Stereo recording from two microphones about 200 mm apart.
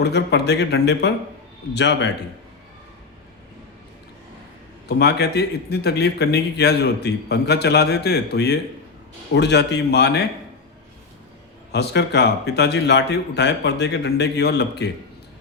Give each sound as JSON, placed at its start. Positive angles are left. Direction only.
{"t": 0.0, "sound": "speech", "side_deg": 55}
{"t": 4.9, "sound": "speech", "side_deg": 55}
{"t": 11.7, "sound": "speech", "side_deg": 55}